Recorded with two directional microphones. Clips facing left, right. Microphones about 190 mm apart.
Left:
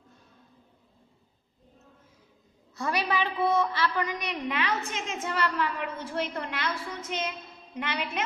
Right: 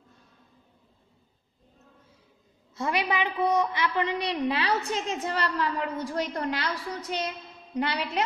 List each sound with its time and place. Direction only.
2.7 s a woman's voice: 20° right (ahead or behind)